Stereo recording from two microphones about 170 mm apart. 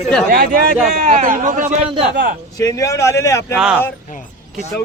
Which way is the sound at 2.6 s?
20° left (ahead or behind).